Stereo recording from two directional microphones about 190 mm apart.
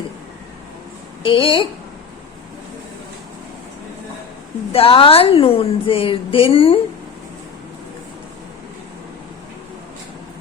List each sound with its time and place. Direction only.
1.2 s a woman's voice: 25° left (ahead or behind)
4.7 s a woman's voice: 30° left (ahead or behind)